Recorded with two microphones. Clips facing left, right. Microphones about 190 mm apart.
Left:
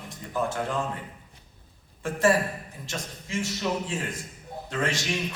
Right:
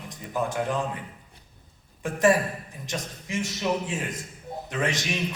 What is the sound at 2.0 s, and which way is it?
A man's voice, 15° right (ahead or behind).